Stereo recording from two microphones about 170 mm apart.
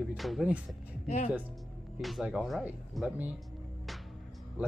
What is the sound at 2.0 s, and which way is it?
Speech, centre (ahead or behind).